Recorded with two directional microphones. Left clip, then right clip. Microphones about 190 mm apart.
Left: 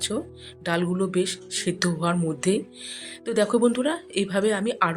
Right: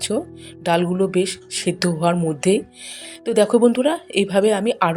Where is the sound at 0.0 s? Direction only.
15° right (ahead or behind).